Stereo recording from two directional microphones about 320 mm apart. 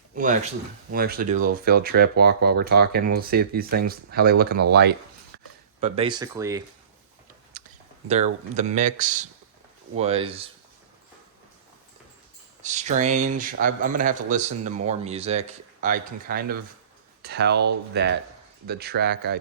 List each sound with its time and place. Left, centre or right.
0.2 s speech: right
5.8 s speech: centre
8.0 s speech: right
12.6 s speech: right